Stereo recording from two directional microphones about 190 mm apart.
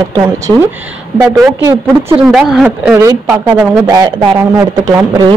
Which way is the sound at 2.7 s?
15° right (ahead or behind).